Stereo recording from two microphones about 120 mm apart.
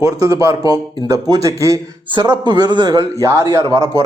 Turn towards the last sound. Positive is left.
turn(degrees=-25)  # may be behind; listen again after turning